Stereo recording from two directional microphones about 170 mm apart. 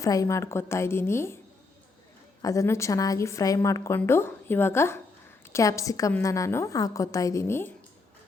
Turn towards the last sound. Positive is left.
turn(degrees=15)  # may be behind; listen again after turning